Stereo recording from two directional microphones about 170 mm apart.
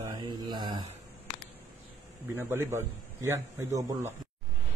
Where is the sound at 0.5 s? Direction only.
25° right (ahead or behind).